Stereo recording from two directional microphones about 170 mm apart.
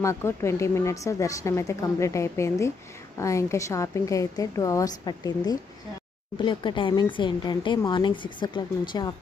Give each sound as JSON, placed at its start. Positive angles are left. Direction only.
{"t": 0.0, "sound": "a woman's voice", "side_deg": 15}